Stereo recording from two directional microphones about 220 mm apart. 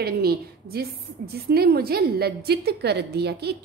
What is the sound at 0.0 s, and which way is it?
A woman's voice, 45° right (ahead or behind).